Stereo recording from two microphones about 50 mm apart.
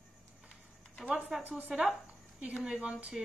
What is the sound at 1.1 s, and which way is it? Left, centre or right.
Speech, right.